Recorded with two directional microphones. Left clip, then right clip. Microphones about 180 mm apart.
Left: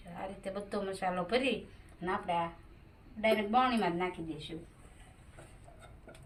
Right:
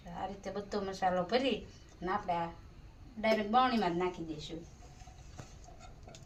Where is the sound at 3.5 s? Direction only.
15° right (ahead or behind).